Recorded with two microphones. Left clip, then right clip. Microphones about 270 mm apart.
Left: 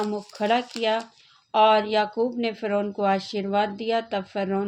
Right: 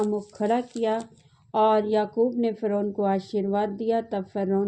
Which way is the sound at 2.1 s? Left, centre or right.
Left.